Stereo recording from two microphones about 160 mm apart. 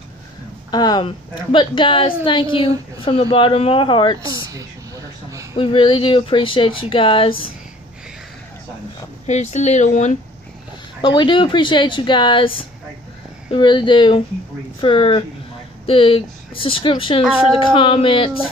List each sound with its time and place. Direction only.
0.7 s a woman's voice: 25° left (ahead or behind)
4.3 s speech: 20° right (ahead or behind)
5.5 s a woman's voice: 30° left (ahead or behind)
9.2 s speech: 45° left (ahead or behind)
11.0 s a woman's voice: 30° left (ahead or behind)